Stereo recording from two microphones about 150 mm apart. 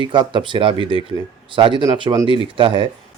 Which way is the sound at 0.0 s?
30° right (ahead or behind).